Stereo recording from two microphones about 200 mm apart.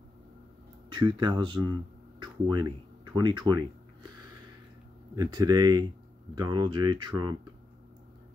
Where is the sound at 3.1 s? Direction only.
20° right (ahead or behind).